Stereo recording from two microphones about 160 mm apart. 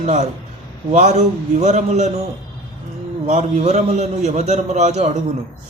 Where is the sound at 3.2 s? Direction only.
45° right (ahead or behind).